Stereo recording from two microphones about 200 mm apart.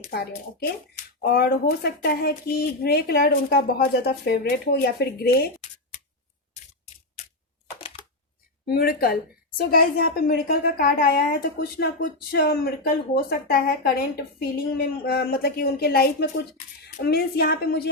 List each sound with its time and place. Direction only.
0.1 s a woman's voice: 50° left (ahead or behind)
5.5 s shuffling cards: 35° left (ahead or behind)
8.6 s a woman's voice: 50° left (ahead or behind)